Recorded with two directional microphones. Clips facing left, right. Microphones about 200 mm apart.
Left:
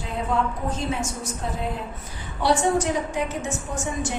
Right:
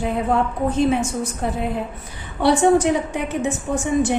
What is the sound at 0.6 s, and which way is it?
A woman's voice, 60° right (ahead or behind).